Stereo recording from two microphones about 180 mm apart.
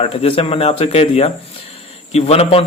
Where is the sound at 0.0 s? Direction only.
30° left (ahead or behind).